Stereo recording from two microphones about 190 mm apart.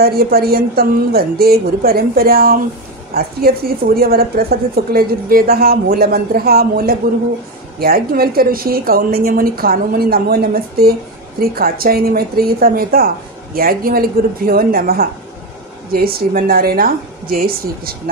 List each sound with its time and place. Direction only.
0.0 s a woman's voice: 55° right (ahead or behind)